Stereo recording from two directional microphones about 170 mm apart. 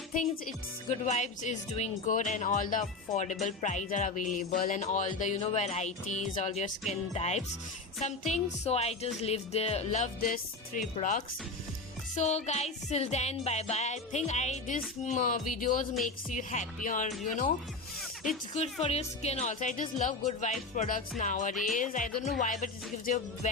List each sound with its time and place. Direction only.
0.9 s music: 40° left (ahead or behind)
10.2 s music: 55° left (ahead or behind)
18.5 s music: 40° left (ahead or behind)